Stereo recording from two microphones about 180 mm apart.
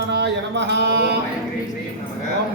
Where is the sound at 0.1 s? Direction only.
70° right (ahead or behind).